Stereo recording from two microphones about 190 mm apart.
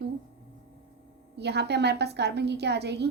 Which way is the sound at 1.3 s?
60° right (ahead or behind).